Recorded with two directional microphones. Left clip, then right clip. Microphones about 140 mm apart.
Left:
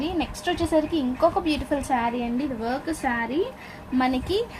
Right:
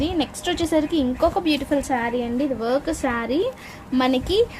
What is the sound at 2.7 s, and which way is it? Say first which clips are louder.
A woman's voice: right 4 dB; 45° right (ahead or behind).